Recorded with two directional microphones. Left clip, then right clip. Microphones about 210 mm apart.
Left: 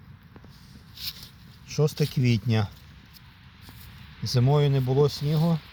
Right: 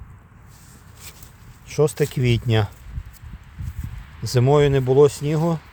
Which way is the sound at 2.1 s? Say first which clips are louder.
Right 5 dB; 60° right (ahead or behind).